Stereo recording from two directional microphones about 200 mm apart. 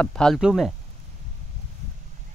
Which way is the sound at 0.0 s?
5° left (ahead or behind).